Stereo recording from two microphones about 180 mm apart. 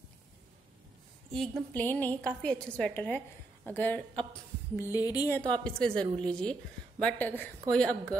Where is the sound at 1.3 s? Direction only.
5° left (ahead or behind); by 5.4 s 20° left (ahead or behind).